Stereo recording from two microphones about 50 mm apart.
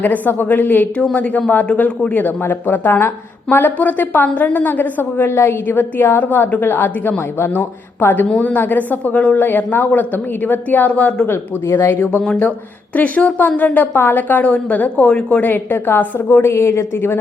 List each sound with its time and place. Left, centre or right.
0.0 s a woman's voice: left
11.3 s speech: left
13.0 s a woman's voice: left
15.4 s a woman's voice: left